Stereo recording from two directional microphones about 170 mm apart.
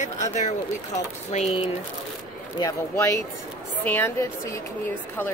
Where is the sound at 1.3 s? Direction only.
35° left (ahead or behind).